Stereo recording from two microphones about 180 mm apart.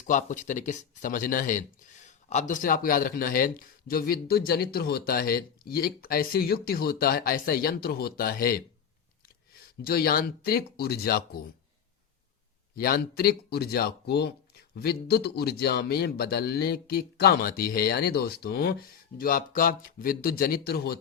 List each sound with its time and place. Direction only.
0.0 s speech: 45° left (ahead or behind)
9.8 s speech: 55° left (ahead or behind)
12.7 s speech: 55° left (ahead or behind)